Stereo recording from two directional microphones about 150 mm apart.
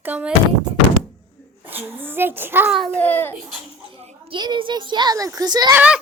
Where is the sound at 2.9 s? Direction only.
10° left (ahead or behind).